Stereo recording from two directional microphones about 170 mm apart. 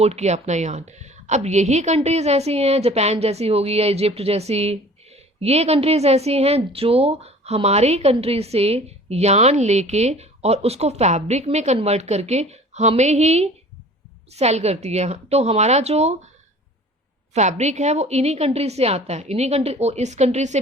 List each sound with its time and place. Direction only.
0.0 s a woman's voice: 40° right (ahead or behind)
17.3 s a woman's voice: 40° right (ahead or behind)